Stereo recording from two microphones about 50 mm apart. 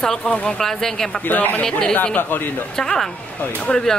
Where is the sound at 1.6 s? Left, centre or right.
Centre.